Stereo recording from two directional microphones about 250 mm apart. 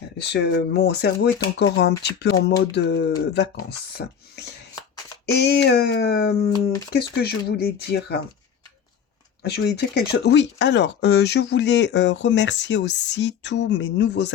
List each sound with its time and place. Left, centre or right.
0.2 s speech: left
9.4 s speech: left